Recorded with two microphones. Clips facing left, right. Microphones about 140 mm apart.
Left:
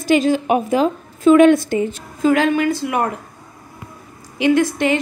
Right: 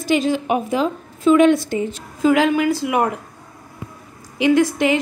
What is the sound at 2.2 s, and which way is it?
Speech, 10° right (ahead or behind).